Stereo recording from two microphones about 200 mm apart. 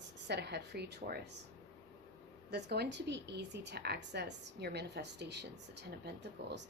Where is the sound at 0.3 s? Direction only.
55° right (ahead or behind).